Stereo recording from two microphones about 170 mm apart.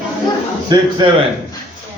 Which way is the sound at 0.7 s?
25° right (ahead or behind).